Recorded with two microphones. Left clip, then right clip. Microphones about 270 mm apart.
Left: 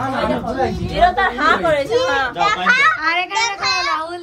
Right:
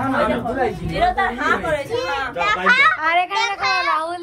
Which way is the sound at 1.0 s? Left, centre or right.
Left.